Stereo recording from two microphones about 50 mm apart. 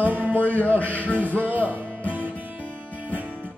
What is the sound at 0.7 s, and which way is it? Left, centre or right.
Speech, left.